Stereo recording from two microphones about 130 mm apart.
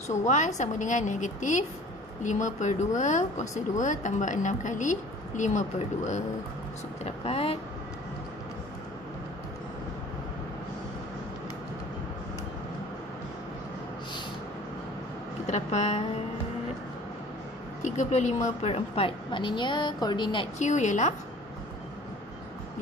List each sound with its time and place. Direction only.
0.1 s a woman's voice: 70° left (ahead or behind)
7.1 s speech: 50° left (ahead or behind)
15.4 s a woman's voice: 60° left (ahead or behind)
17.8 s a woman's voice: 65° left (ahead or behind); by 20.4 s 35° left (ahead or behind)
20.5 s a woman's voice: 65° left (ahead or behind)